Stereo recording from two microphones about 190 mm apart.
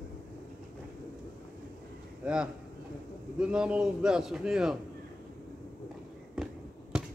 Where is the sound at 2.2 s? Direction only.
5° right (ahead or behind).